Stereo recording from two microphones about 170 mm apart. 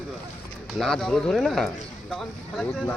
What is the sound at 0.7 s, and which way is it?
Speech, 5° left (ahead or behind).